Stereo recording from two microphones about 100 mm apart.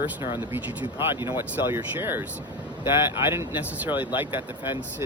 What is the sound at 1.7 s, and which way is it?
Speech, 20° right (ahead or behind).